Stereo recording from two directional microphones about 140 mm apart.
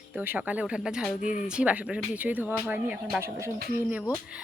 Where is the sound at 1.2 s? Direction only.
65° left (ahead or behind).